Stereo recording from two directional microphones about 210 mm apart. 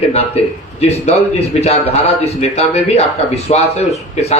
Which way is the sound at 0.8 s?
30° left (ahead or behind).